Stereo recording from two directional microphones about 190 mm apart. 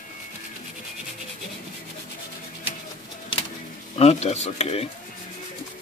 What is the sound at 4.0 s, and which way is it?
Speech, 35° left (ahead or behind).